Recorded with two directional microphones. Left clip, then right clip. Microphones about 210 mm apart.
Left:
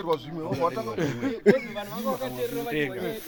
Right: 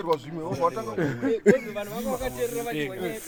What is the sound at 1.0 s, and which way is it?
Speech, 30° right (ahead or behind).